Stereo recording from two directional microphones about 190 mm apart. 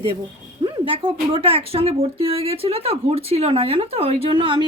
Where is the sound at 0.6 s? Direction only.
30° right (ahead or behind).